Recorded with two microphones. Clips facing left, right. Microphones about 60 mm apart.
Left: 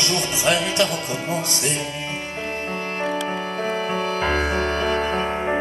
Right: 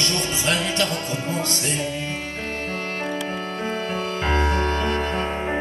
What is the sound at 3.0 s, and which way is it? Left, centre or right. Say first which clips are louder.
Music: left 3 dB; left.